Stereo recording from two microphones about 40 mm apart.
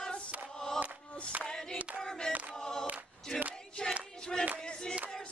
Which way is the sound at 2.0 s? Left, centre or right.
Centre.